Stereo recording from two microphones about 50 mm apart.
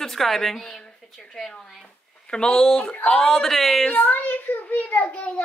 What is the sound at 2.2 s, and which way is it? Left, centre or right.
Speech, centre.